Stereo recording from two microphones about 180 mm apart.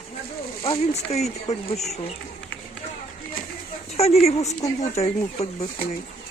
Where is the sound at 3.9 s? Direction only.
35° left (ahead or behind).